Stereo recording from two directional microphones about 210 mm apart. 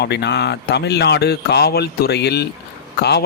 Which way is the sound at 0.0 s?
55° left (ahead or behind).